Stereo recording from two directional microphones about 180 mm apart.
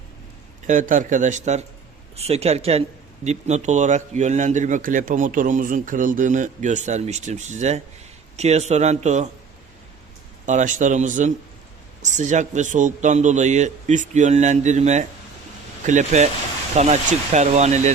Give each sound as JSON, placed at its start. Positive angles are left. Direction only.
{"t": 0.7, "sound": "a man's voice", "side_deg": -45}
{"t": 10.4, "sound": "a man's voice", "side_deg": -45}